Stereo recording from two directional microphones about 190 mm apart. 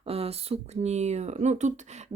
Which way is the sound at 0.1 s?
30° right (ahead or behind).